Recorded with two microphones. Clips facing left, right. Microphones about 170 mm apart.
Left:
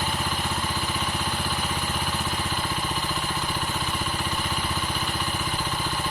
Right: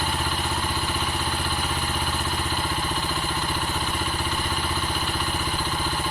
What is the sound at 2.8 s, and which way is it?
Vehicle, centre (ahead or behind).